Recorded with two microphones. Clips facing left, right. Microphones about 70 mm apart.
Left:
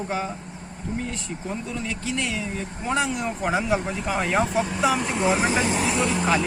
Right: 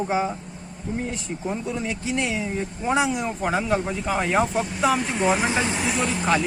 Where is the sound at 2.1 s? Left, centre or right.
Right.